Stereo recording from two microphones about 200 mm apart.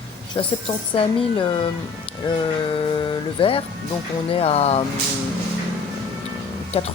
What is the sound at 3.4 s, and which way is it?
Speech, 25° left (ahead or behind).